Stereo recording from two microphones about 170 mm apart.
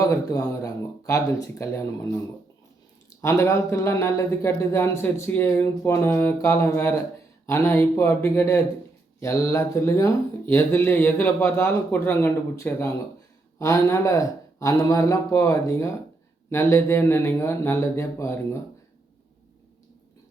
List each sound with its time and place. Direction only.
0.0 s speech: 20° left (ahead or behind)
3.2 s speech: 15° left (ahead or behind)